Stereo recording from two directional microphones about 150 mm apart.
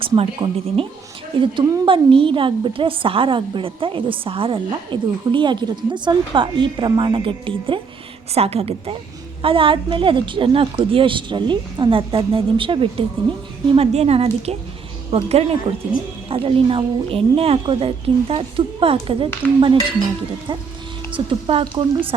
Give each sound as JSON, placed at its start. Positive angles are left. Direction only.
{"t": 0.0, "sound": "a woman's voice", "side_deg": -40}
{"t": 1.4, "sound": "a woman's voice", "side_deg": -25}